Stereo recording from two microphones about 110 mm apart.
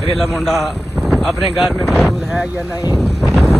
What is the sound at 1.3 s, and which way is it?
Speech, centre (ahead or behind).